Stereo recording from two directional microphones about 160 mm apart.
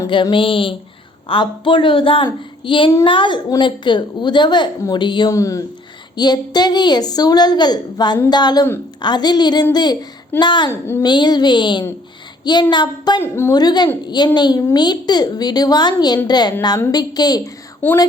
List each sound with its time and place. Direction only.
0.1 s a woman's voice: 30° left (ahead or behind)
10.7 s speech: 15° left (ahead or behind)
11.0 s a woman's voice: 25° left (ahead or behind)
13.2 s a woman's voice: 15° left (ahead or behind)
17.8 s speech: 10° left (ahead or behind)